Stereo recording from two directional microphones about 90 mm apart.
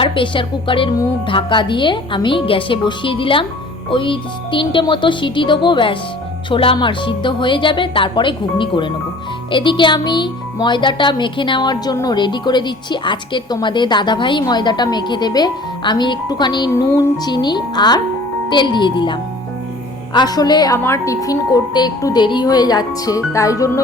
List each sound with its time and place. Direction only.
0.0 s a woman's voice: 70° left (ahead or behind)
6.5 s speech: 90° left
6.7 s a woman's voice: 65° left (ahead or behind)
20.1 s a woman's voice: 50° left (ahead or behind)
20.7 s speech: 30° left (ahead or behind)